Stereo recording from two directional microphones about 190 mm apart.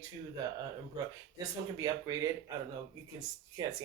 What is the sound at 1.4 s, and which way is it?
Speech, 20° right (ahead or behind).